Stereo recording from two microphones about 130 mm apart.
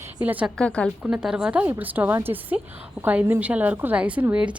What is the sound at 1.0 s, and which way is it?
A woman's voice, 5° right (ahead or behind).